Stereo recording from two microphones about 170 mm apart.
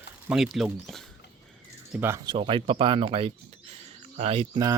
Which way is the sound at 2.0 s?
15° right (ahead or behind).